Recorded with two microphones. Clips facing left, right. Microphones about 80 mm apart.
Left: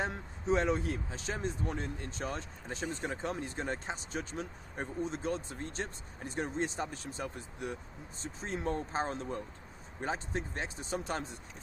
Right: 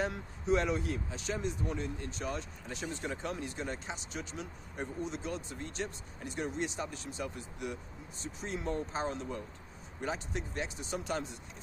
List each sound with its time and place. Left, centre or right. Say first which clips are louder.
0.0 s speech: right 1 dB; left